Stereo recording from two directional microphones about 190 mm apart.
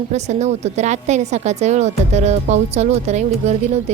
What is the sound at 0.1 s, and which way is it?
A woman's voice, 35° right (ahead or behind).